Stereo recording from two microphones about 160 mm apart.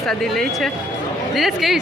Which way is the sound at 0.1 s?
Centre (ahead or behind).